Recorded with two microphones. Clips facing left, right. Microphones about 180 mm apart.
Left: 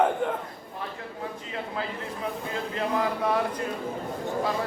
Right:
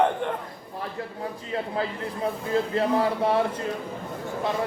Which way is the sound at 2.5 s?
35° right (ahead or behind).